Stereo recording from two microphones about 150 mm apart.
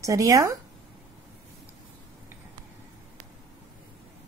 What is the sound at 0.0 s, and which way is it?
Speech, 20° right (ahead or behind).